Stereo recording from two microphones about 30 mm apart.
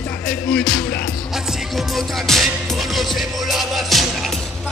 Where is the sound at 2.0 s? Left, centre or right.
Centre.